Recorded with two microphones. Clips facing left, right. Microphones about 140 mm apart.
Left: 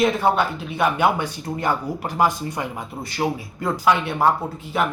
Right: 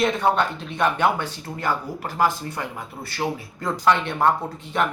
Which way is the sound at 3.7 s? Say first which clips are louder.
Left 1 dB; 5° left (ahead or behind).